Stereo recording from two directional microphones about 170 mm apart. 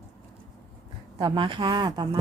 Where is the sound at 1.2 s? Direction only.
30° right (ahead or behind).